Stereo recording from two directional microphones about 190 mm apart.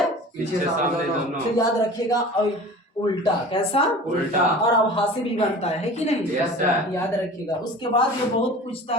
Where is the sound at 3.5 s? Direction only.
30° left (ahead or behind).